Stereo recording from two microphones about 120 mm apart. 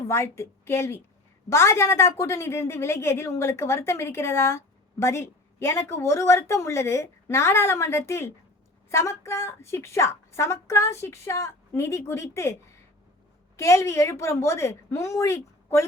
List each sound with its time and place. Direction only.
0.1 s a woman's voice: 20° left (ahead or behind)
13.6 s a woman's voice: 25° left (ahead or behind)